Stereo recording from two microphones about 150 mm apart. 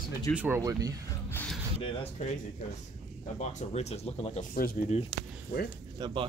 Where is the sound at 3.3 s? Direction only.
50° left (ahead or behind).